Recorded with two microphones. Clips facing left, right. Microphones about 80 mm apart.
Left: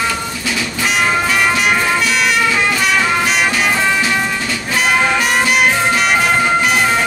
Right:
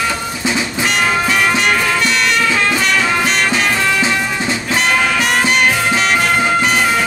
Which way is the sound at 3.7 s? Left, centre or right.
Centre.